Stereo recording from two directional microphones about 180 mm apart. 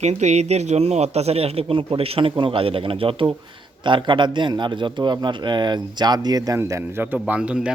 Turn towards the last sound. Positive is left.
turn(degrees=-5)  # may be behind; listen again after turning